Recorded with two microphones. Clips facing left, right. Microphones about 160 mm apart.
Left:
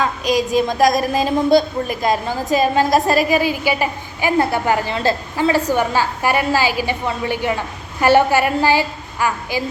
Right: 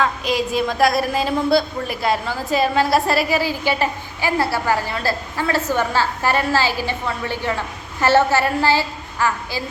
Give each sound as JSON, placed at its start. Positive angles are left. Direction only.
{"t": 0.0, "sound": "a woman's voice", "side_deg": 15}